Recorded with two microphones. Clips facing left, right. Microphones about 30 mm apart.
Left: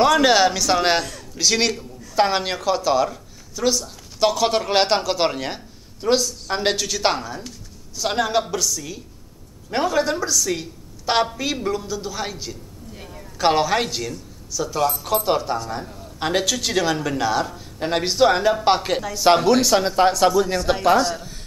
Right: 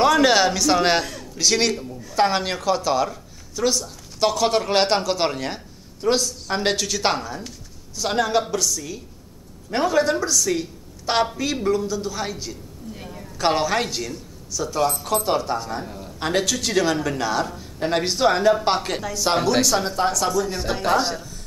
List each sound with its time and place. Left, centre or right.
0.0 s a woman's voice: centre
15.7 s a man's voice: centre
16.2 s speech: centre
19.1 s speech: centre
20.7 s speech: centre